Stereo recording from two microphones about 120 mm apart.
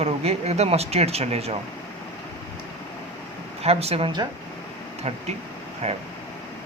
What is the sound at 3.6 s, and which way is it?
Speech, 60° right (ahead or behind).